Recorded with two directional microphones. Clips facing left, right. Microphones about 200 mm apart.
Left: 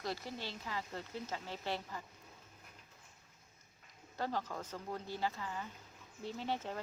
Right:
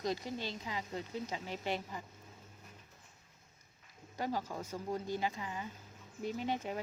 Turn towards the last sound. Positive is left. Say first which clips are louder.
# right 3 dB
turn(degrees=-15)  # may be behind; listen again after turning